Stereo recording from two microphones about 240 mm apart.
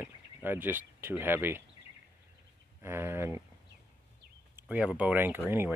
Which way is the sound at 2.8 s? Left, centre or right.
Centre.